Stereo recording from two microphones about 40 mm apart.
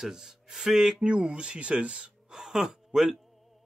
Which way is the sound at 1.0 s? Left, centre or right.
Right.